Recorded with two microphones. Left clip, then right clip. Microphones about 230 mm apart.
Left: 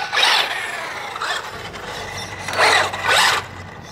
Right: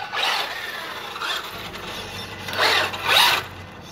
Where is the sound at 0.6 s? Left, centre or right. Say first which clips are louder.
Left 5 dB; centre.